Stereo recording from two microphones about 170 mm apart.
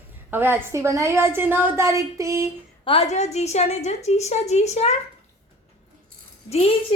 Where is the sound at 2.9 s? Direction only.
40° left (ahead or behind).